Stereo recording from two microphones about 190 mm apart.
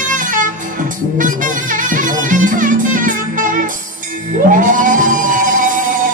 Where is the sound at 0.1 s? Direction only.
45° right (ahead or behind).